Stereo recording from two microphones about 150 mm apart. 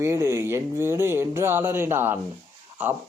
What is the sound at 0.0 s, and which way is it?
Speech, 20° right (ahead or behind).